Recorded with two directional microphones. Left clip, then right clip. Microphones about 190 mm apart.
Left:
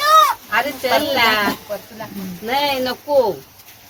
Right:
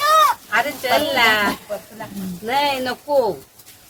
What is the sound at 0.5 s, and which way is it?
Speech, 5° right (ahead or behind).